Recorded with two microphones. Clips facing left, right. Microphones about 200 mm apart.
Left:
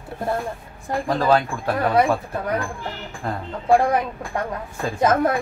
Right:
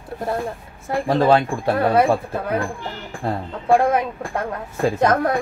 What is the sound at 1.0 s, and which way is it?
Speech, 30° right (ahead or behind).